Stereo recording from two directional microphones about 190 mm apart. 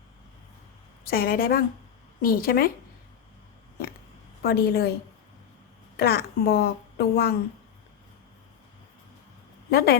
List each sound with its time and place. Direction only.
1.0 s a woman's voice: 50° left (ahead or behind)
4.4 s a woman's voice: 55° left (ahead or behind)
6.0 s a woman's voice: 55° left (ahead or behind)
9.6 s speech: 55° left (ahead or behind)